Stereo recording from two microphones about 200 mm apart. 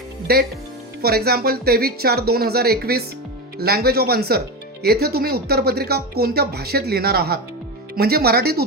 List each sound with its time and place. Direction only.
0.3 s speech: 50° right (ahead or behind)